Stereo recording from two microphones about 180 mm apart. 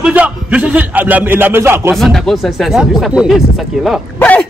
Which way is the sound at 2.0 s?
Centre (ahead or behind).